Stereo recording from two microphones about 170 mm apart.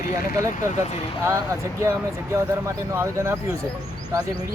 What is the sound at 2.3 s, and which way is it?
Speech, 15° right (ahead or behind).